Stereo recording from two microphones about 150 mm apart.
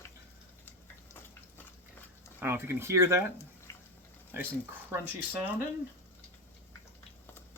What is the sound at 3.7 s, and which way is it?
Water, 20° left (ahead or behind).